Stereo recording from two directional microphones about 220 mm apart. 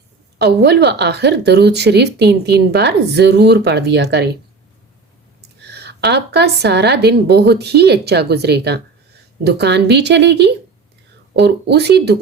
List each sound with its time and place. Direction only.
0.3 s speech: 50° right (ahead or behind)
5.5 s speech: 50° right (ahead or behind)